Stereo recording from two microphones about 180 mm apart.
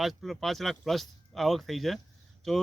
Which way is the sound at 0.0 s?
Centre (ahead or behind).